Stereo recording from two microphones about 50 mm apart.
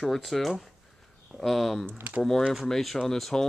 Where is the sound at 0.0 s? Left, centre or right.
Centre.